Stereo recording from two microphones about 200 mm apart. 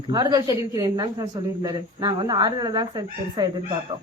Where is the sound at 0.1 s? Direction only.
20° right (ahead or behind).